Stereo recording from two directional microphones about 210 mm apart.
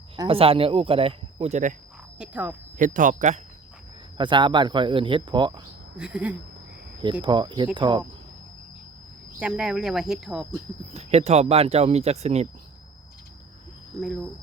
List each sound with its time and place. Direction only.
0.2 s speech: 25° right (ahead or behind)
2.1 s speech: 5° right (ahead or behind)
2.7 s speech: 40° right (ahead or behind)
4.2 s speech: 20° right (ahead or behind)
6.0 s speech: 5° right (ahead or behind)
7.0 s speech: 20° right (ahead or behind)
9.4 s speech: 5° right (ahead or behind)
10.9 s speech: 30° right (ahead or behind)